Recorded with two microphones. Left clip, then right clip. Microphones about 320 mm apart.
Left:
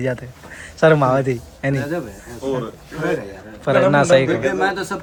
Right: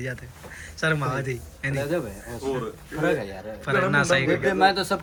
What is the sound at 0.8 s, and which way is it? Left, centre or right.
Speech, centre.